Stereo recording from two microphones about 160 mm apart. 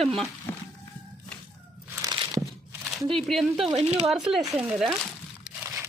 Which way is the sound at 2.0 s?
25° right (ahead or behind).